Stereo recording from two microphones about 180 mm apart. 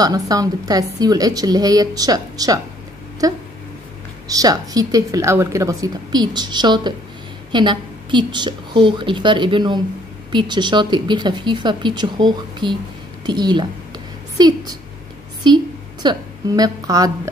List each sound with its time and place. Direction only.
0.0 s a woman's voice: 20° right (ahead or behind)
4.3 s a woman's voice: 20° right (ahead or behind)